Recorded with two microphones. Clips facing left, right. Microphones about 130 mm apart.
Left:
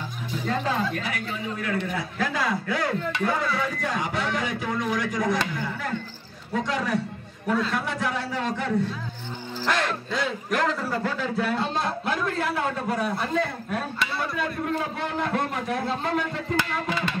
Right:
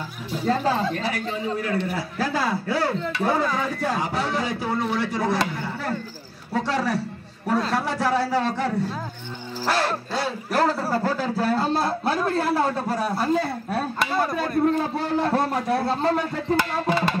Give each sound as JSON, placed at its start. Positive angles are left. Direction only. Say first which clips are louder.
{"t": 0.5, "sound": "a man's voice", "louder": "right 4 dB", "side_deg": -35}